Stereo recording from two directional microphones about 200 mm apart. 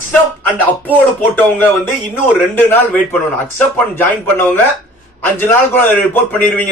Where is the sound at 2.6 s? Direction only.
10° left (ahead or behind).